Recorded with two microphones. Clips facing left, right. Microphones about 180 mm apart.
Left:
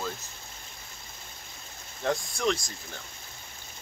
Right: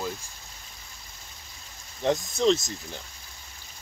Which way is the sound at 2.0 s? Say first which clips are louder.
Right 5 dB; 20° right (ahead or behind).